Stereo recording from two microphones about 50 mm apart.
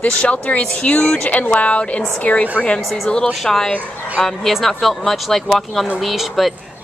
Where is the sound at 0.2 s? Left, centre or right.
Left.